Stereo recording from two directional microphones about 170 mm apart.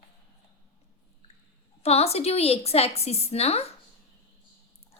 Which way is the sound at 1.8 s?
35° left (ahead or behind).